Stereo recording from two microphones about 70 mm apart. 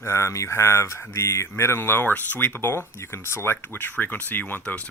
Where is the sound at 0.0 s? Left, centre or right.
Left.